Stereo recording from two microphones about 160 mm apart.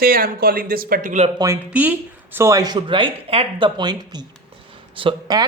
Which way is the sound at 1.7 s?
10° right (ahead or behind).